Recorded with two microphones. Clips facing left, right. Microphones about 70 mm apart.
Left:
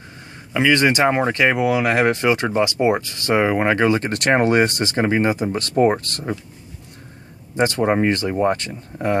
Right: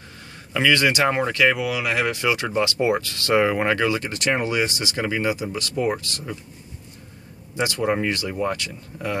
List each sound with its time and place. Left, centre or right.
0.5 s a man's voice: centre
0.7 s speech: left
3.7 s speech: left
4.1 s speech: left
7.5 s speech: left